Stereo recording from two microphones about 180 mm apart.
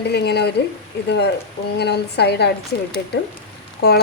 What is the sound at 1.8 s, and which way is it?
Speech, 65° left (ahead or behind).